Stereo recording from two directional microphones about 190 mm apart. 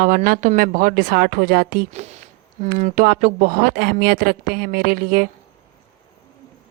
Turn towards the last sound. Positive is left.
turn(degrees=-50)  # may be behind; listen again after turning